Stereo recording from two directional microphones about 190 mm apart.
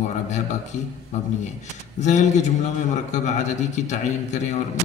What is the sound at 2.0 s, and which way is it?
A man's voice, 40° left (ahead or behind).